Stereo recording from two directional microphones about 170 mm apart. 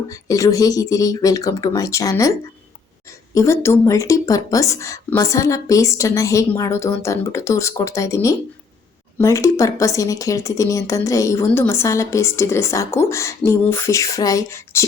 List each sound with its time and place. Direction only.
0.1 s speech: 20° left (ahead or behind)
3.3 s speech: 15° left (ahead or behind)